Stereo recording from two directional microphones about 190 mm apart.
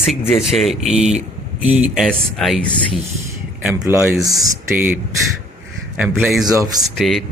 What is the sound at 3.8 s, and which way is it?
Speech, 15° right (ahead or behind).